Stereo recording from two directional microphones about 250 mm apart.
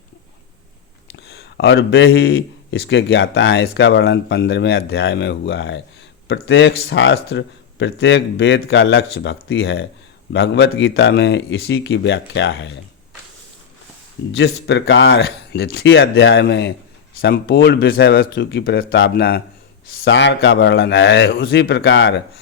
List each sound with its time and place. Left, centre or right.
1.1 s speech: left
14.3 s speech: left